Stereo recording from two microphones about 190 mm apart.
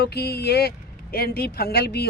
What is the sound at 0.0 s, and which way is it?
A woman's voice, 55° left (ahead or behind).